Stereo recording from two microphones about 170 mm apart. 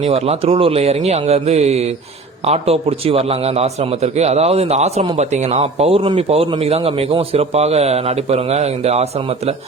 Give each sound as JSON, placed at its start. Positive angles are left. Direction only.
{"t": 0.0, "sound": "a man's voice", "side_deg": -35}